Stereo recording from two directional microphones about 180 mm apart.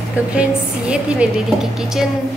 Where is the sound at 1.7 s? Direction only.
Centre (ahead or behind).